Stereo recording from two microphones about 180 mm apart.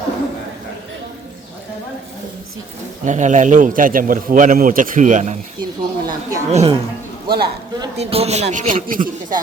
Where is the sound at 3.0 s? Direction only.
45° right (ahead or behind).